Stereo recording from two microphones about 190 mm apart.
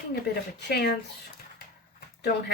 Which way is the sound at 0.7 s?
60° left (ahead or behind).